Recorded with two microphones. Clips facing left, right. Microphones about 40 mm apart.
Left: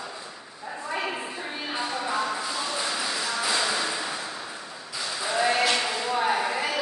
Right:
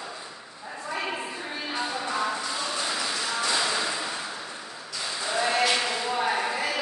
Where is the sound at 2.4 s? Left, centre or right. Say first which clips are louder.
Left 1 dB; centre.